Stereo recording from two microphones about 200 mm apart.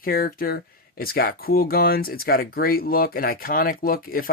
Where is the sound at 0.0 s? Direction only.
50° left (ahead or behind).